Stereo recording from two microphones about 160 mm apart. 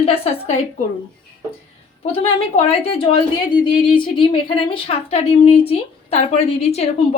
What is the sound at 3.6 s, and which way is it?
Speech, 30° left (ahead or behind).